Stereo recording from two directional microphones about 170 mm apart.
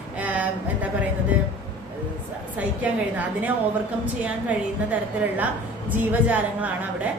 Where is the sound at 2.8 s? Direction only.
10° right (ahead or behind).